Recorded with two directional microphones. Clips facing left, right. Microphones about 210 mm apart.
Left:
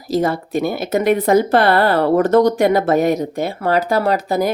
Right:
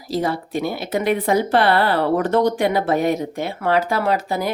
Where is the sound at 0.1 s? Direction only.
45° left (ahead or behind).